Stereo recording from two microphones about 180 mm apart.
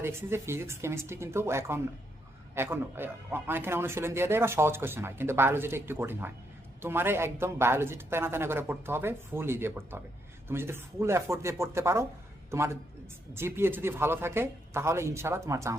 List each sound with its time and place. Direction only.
0.0 s a man's voice: 15° right (ahead or behind)